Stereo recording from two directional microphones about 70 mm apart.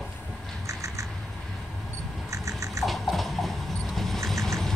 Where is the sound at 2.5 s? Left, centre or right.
Right.